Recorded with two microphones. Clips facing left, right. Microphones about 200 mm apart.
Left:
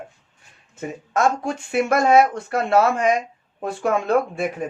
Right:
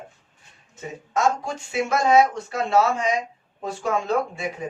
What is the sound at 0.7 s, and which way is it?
Speech, 55° left (ahead or behind).